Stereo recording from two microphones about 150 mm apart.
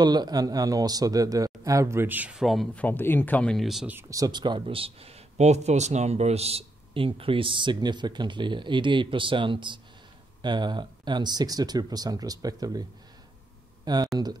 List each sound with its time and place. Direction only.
0.0 s speech: 25° right (ahead or behind); by 3.9 s centre (ahead or behind)
3.9 s speech: 25° right (ahead or behind)
13.9 s speech: 30° right (ahead or behind)